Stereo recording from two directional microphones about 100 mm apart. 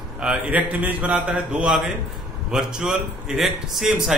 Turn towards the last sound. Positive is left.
turn(degrees=-5)  # may be behind; listen again after turning